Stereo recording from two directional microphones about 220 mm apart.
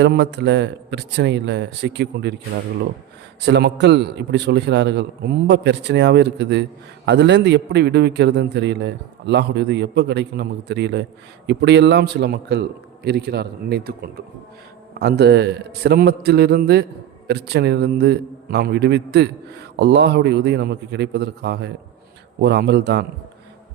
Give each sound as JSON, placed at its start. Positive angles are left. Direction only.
{"t": 0.0, "sound": "a man's voice", "side_deg": -50}
{"t": 3.4, "sound": "a man's voice", "side_deg": -50}